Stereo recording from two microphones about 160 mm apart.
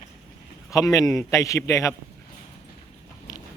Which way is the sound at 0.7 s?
20° left (ahead or behind).